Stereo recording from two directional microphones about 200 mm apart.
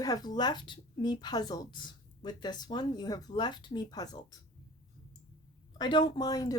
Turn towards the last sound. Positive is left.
turn(degrees=20)  # may be behind; listen again after turning